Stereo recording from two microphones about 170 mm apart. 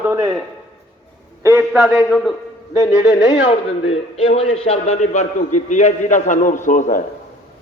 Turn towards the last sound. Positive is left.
turn(degrees=50)  # may be behind; listen again after turning